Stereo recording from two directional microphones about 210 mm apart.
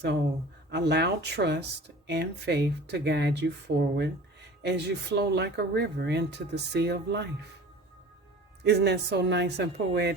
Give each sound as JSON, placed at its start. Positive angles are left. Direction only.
{"t": 0.7, "sound": "speech", "side_deg": -55}
{"t": 8.6, "sound": "speech", "side_deg": -55}